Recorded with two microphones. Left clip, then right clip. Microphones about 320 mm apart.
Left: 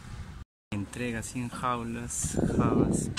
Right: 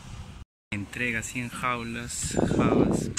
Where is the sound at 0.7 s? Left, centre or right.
Centre.